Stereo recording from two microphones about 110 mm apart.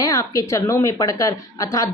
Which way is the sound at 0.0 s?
30° left (ahead or behind).